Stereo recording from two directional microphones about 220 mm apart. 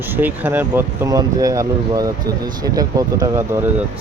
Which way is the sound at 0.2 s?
10° right (ahead or behind).